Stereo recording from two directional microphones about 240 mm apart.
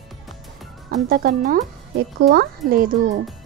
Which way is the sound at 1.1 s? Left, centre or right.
Right.